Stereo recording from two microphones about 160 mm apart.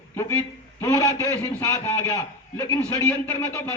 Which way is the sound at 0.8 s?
20° left (ahead or behind).